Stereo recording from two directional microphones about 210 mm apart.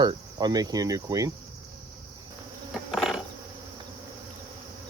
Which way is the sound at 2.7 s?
Centre (ahead or behind).